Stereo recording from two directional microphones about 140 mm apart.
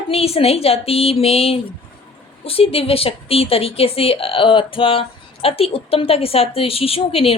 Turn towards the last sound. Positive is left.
turn(degrees=45)  # may be behind; listen again after turning